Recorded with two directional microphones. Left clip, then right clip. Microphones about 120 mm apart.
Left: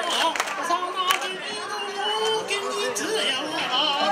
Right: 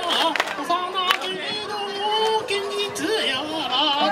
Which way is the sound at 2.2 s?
40° left (ahead or behind).